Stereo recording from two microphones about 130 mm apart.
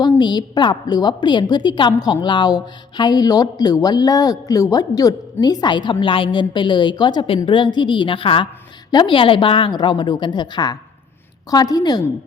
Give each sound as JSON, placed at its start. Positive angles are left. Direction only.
{"t": 0.2, "sound": "a woman's voice", "side_deg": 35}